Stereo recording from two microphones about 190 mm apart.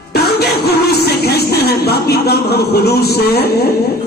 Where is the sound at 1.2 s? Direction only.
55° left (ahead or behind).